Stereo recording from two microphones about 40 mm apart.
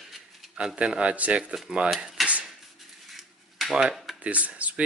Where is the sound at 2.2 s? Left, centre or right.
Centre.